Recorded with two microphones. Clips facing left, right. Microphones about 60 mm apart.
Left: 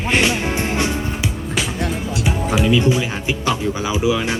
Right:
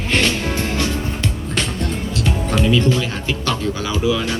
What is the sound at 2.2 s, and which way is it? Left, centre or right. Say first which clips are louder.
Speech: even; centre.